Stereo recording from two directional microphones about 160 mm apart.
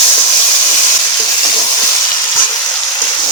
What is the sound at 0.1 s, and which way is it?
Hiss, 25° left (ahead or behind).